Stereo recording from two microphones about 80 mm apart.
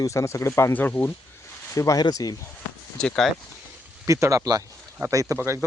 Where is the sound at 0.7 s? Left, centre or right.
Left.